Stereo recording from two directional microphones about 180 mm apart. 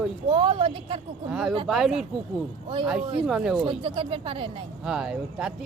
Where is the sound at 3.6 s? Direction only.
25° right (ahead or behind).